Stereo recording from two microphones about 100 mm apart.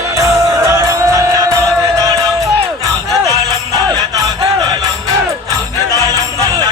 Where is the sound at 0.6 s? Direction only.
30° right (ahead or behind).